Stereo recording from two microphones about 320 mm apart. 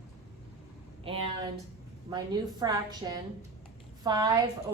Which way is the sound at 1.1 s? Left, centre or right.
Centre.